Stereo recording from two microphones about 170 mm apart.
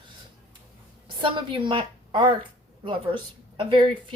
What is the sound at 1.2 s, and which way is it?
A woman's voice, 30° right (ahead or behind).